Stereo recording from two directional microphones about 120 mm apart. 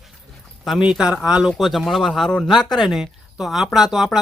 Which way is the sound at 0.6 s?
5° right (ahead or behind).